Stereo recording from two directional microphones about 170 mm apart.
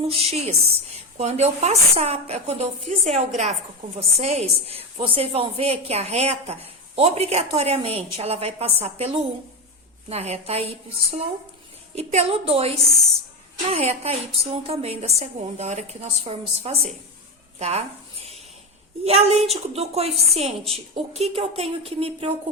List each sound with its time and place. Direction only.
0.0 s a woman's voice: 35° right (ahead or behind)
19.0 s a woman's voice: 40° right (ahead or behind)